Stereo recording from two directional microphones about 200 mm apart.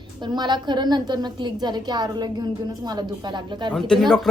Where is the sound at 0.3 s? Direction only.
20° right (ahead or behind).